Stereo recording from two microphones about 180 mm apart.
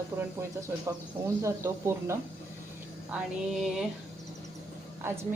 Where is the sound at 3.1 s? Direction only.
Centre (ahead or behind).